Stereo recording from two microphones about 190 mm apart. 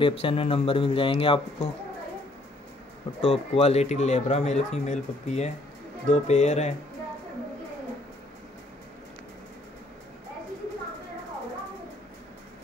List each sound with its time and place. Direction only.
0.0 s speech: 30° left (ahead or behind)
3.2 s speech: 35° left (ahead or behind)